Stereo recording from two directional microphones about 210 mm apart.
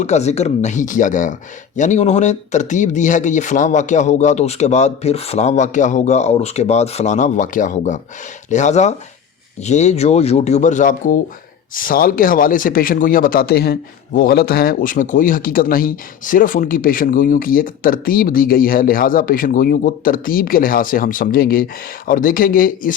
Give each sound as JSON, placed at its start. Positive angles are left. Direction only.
{"t": 0.0, "sound": "a man's voice", "side_deg": 30}